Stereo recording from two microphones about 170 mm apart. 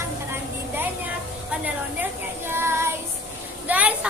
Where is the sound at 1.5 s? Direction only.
10° right (ahead or behind).